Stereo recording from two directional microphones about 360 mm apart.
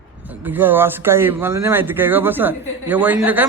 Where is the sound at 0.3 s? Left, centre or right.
Centre.